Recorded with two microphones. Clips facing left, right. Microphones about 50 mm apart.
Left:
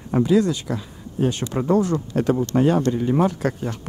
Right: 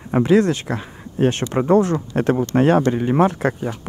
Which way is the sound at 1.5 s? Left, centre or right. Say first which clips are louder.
Right 3 dB; right.